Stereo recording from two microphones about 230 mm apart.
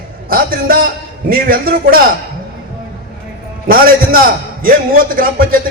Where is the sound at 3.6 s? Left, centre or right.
Right.